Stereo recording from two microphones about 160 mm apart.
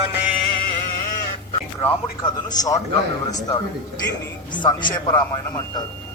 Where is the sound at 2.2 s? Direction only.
25° left (ahead or behind).